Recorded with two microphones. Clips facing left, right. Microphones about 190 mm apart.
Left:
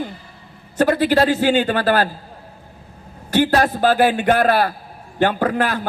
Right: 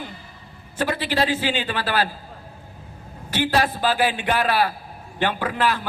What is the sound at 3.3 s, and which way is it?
A man's voice, 45° left (ahead or behind).